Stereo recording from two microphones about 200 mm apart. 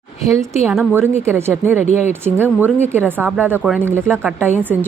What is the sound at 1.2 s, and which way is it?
Speech, 10° right (ahead or behind).